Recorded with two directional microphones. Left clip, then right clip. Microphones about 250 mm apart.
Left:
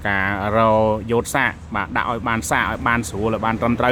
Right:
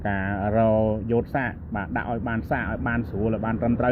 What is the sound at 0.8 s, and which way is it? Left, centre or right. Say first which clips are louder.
Speech: left 6 dB; left.